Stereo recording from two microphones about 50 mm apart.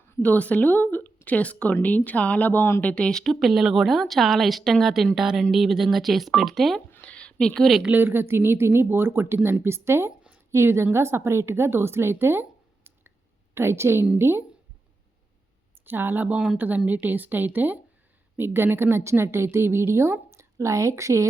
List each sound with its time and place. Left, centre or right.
0.2 s a woman's voice: left
2.8 s speech: centre
3.1 s speech: centre
3.4 s a woman's voice: centre
7.0 s a sound: left
7.9 s a woman's voice: right
10.5 s a woman's voice: right
13.5 s a woman's voice: right
15.9 s a woman's voice: right
18.3 s a woman's voice: right